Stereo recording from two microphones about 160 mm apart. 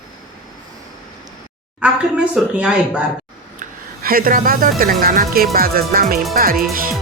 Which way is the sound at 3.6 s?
65° right (ahead or behind).